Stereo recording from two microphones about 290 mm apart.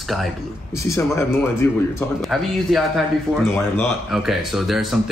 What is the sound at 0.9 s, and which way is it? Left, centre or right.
Speech, centre.